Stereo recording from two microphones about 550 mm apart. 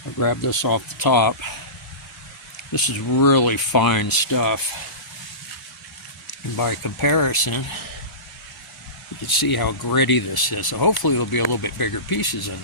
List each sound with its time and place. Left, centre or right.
0.2 s speech: left
3.2 s speech: left
6.2 s speech: left
9.2 s speech: left